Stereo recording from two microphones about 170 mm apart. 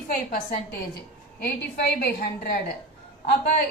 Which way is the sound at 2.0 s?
65° left (ahead or behind).